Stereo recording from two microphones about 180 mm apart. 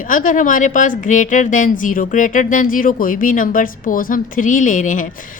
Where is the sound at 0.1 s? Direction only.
45° left (ahead or behind).